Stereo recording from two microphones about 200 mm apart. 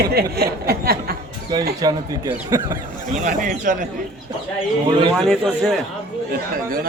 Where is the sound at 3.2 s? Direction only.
40° right (ahead or behind).